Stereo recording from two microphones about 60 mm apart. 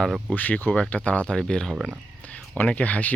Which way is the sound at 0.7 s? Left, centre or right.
Centre.